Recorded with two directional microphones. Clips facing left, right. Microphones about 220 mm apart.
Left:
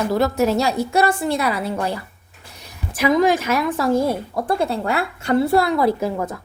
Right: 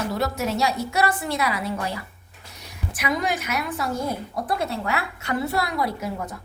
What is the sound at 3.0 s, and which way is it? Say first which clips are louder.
Speech: left 9 dB; 90° left.